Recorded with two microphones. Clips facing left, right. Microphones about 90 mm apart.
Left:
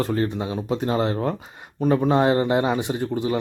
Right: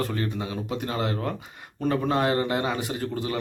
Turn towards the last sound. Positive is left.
turn(degrees=20)  # may be behind; listen again after turning